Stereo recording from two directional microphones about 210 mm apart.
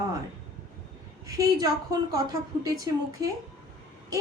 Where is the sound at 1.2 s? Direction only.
15° right (ahead or behind).